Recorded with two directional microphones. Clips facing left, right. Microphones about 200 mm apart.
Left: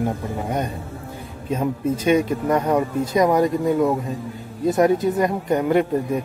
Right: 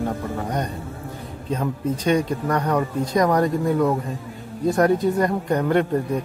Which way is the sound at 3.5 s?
Centre (ahead or behind).